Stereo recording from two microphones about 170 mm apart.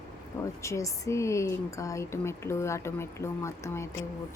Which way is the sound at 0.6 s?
15° left (ahead or behind).